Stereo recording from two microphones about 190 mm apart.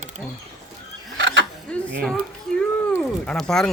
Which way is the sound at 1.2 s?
65° right (ahead or behind).